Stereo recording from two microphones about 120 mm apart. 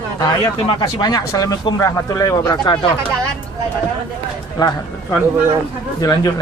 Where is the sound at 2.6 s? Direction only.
40° left (ahead or behind).